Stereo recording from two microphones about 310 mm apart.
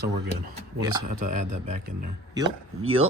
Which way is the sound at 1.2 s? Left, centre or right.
Right.